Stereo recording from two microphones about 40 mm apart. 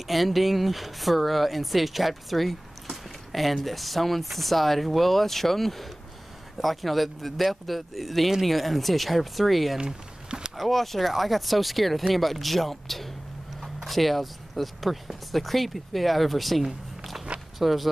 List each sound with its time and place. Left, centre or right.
0.0 s speech: centre
9.8 s a sound: centre
10.5 s speech: centre